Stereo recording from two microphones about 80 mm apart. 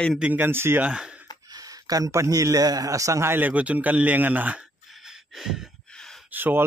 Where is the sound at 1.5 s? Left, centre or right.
Right.